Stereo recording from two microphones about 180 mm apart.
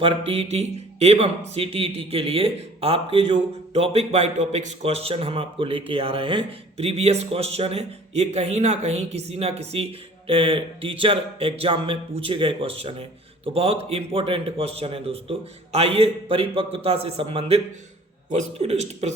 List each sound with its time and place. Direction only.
0.0 s speech: 35° right (ahead or behind)